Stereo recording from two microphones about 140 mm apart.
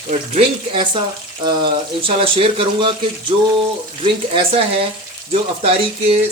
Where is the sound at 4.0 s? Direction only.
40° right (ahead or behind).